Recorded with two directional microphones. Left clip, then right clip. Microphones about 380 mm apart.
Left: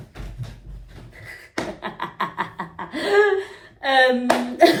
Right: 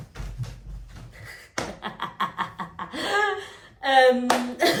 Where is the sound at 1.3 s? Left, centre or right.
Centre.